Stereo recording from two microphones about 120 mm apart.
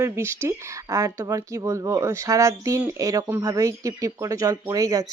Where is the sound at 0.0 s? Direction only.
20° right (ahead or behind).